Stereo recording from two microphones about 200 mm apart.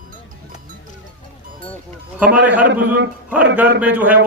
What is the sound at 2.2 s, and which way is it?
Speech, 5° right (ahead or behind).